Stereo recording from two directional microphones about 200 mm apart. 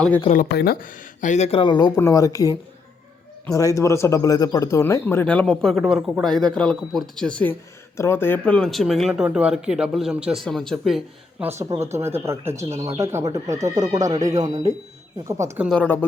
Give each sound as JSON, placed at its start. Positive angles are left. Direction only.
{"t": 0.5, "sound": "speech", "side_deg": 50}
{"t": 11.6, "sound": "speech", "side_deg": -20}
{"t": 15.7, "sound": "speech", "side_deg": 10}